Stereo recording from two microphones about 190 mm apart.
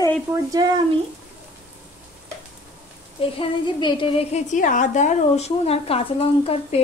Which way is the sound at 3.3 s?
25° left (ahead or behind).